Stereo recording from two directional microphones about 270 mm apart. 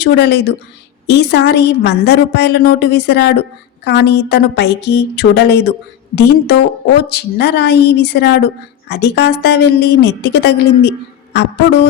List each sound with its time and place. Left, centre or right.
0.0 s a woman's voice: left